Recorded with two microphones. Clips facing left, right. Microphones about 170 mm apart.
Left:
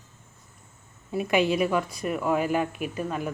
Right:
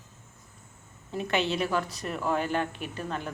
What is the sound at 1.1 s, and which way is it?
Speech, 10° left (ahead or behind).